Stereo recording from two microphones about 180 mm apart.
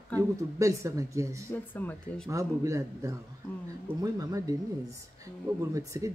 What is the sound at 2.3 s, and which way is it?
Speech, 20° right (ahead or behind).